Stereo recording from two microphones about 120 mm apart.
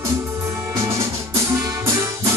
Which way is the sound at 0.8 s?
20° right (ahead or behind).